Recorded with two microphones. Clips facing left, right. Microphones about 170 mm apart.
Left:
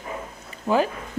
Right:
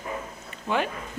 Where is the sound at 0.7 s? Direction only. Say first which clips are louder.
Left 6 dB; 40° left (ahead or behind).